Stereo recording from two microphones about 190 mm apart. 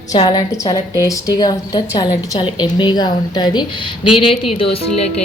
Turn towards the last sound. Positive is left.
turn(degrees=30)  # may be behind; listen again after turning